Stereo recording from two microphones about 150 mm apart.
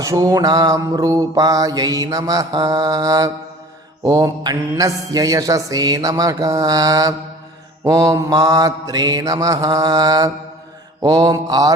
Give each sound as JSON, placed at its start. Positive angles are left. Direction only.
{"t": 0.0, "sound": "mantra", "side_deg": -20}